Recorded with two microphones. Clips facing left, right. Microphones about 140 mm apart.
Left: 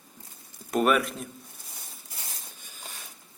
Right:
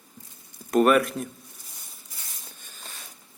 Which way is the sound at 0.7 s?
Centre (ahead or behind).